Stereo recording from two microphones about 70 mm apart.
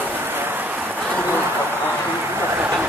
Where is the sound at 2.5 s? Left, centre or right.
Right.